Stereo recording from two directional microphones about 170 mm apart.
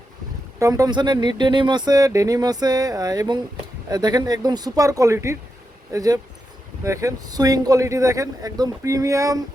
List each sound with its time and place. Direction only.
0.6 s speech: 20° right (ahead or behind)